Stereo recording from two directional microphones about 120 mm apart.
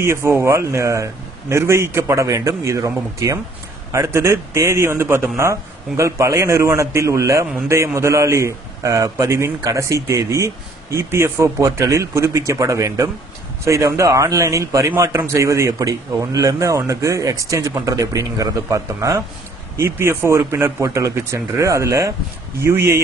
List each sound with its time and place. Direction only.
0.0 s a man's voice: 20° right (ahead or behind)